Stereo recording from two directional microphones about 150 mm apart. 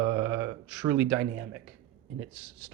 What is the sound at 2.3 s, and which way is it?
Speech, 5° right (ahead or behind).